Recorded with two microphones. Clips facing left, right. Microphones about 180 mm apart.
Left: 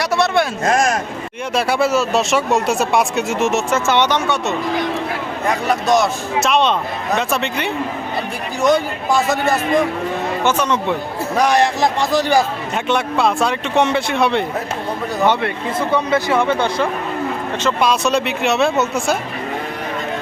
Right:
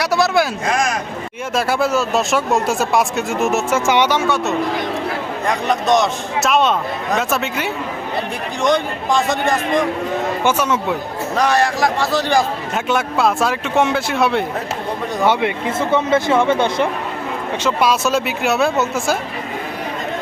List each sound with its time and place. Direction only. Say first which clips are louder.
0.0 s a sound: right 1 dB; centre (ahead or behind)
0.6 s speech: left 3 dB; 45° left (ahead or behind)
1.5 s speech: left 1 dB; centre (ahead or behind)
3.8 s speech: right 1 dB; 10° right (ahead or behind); by 9.6 s 5° left (ahead or behind)
10.4 s speech: left 1 dB; 5° right (ahead or behind)
11.3 s a man's voice: left 1 dB; 15° left (ahead or behind)
12.7 s speech: left 1 dB; centre (ahead or behind); by 16.9 s 20° right (ahead or behind)
17.6 s speech: even; 10° right (ahead or behind)